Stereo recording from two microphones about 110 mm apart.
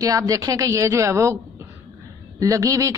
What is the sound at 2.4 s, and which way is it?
Speech, 30° right (ahead or behind).